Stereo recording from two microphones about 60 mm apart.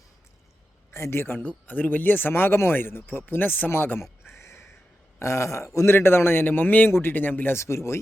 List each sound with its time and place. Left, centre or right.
0.9 s speech: left
1.4 s speech: left
4.2 s a sound: left
5.2 s a man's voice: left
7.5 s a man's voice: left